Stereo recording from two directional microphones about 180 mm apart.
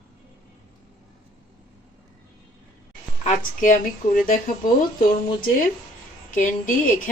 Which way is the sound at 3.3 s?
45° left (ahead or behind).